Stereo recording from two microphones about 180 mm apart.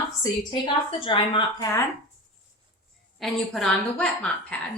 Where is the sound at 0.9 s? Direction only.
30° left (ahead or behind).